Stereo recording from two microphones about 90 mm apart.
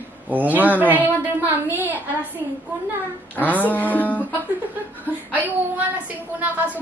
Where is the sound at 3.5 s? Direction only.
20° left (ahead or behind).